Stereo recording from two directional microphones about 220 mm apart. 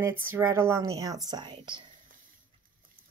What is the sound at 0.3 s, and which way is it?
Speech, 10° right (ahead or behind).